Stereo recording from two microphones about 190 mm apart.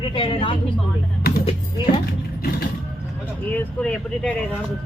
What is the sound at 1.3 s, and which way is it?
Music, 55° left (ahead or behind).